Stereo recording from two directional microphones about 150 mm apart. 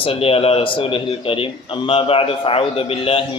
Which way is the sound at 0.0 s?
40° left (ahead or behind).